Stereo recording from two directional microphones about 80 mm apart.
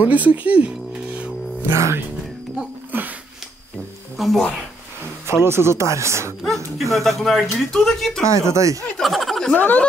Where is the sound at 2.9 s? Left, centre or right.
Right.